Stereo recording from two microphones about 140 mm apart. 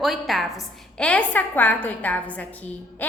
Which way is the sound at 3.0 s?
10° left (ahead or behind).